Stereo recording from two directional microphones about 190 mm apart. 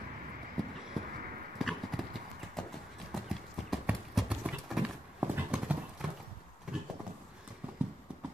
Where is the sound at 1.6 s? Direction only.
Centre (ahead or behind).